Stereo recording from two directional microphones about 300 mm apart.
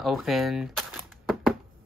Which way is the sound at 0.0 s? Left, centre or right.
Centre.